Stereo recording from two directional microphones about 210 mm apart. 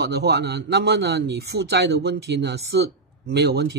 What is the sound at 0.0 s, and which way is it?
A man's voice, 50° right (ahead or behind).